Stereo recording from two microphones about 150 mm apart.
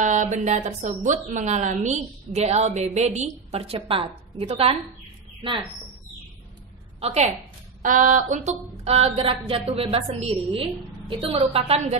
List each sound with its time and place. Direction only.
0.0 s speech: 55° right (ahead or behind)
0.8 s a woman's voice: 60° right (ahead or behind); by 5.7 s 35° right (ahead or behind)
7.0 s a woman's voice: 45° right (ahead or behind)
7.8 s speech: 60° right (ahead or behind); by 12.0 s 40° right (ahead or behind)